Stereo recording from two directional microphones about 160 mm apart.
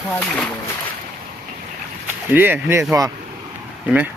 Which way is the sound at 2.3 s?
10° right (ahead or behind).